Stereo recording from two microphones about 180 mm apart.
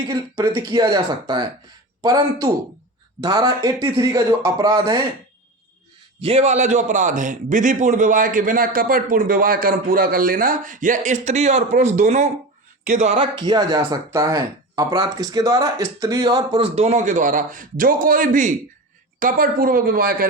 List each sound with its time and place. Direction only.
0.1 s speech: 20° right (ahead or behind)
6.2 s a man's voice: 35° right (ahead or behind); by 20.2 s 55° right (ahead or behind)